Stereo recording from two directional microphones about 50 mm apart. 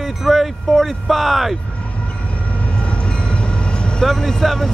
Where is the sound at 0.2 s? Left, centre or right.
Centre.